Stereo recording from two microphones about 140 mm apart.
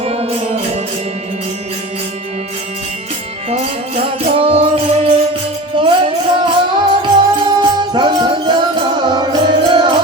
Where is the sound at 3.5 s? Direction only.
50° right (ahead or behind).